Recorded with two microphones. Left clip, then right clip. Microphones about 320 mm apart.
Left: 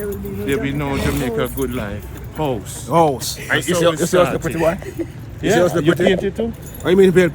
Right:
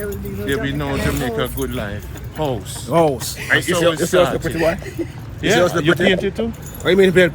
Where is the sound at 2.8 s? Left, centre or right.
Left.